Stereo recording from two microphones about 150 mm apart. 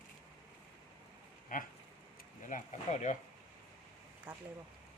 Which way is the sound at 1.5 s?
65° left (ahead or behind).